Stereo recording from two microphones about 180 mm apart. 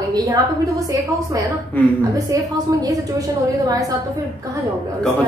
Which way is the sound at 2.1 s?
20° right (ahead or behind).